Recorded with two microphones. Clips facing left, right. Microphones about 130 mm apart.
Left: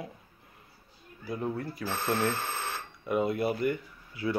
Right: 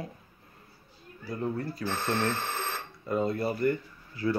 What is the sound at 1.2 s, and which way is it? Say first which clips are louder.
Speech: right 1 dB; 10° left (ahead or behind).